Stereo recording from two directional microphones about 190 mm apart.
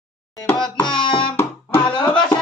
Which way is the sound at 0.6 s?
25° left (ahead or behind).